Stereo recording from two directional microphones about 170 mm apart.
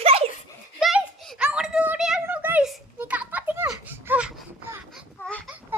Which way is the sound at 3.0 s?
10° right (ahead or behind).